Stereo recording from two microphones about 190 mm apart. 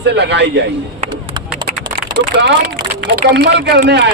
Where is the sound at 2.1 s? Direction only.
65° right (ahead or behind).